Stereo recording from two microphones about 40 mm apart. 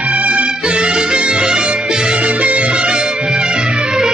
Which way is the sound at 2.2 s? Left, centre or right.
Right.